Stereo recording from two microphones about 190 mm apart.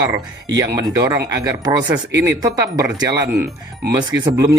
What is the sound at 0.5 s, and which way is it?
Speech, 20° right (ahead or behind).